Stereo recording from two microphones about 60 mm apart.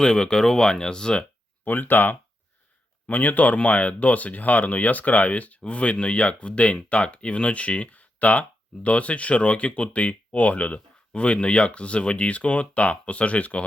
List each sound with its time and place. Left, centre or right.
0.0 s speech: centre
1.6 s speech: left